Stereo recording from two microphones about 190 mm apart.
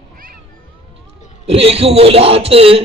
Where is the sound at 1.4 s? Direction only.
30° right (ahead or behind).